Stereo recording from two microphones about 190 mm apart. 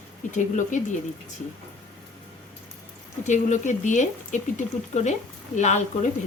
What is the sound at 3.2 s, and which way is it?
Speech, 40° left (ahead or behind).